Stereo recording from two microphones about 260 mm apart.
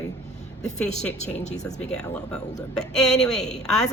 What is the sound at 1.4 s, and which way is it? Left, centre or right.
Speech, left.